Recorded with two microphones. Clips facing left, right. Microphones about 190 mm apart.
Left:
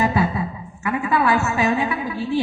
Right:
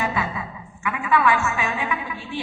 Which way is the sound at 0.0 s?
40° left (ahead or behind).